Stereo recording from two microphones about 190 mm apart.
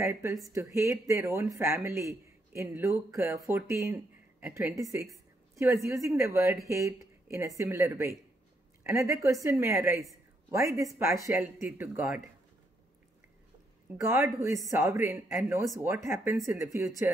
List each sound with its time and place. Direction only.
0.0 s speech: 15° right (ahead or behind)
5.1 s a sound: 15° right (ahead or behind)
5.9 s speech: 15° right (ahead or behind)
13.9 s speech: 15° right (ahead or behind)